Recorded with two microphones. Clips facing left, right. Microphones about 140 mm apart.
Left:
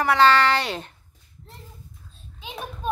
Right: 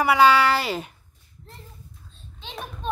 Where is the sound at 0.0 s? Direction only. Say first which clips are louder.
Right 1 dB; 10° right (ahead or behind).